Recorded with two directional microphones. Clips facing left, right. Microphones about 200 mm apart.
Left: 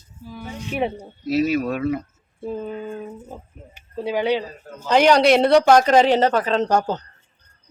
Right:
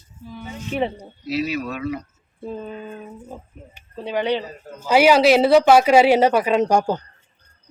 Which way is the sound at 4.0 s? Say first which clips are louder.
Left 1 dB; 10° left (ahead or behind).